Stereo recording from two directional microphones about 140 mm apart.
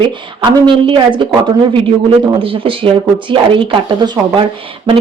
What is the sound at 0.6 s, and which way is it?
Speech, 35° right (ahead or behind).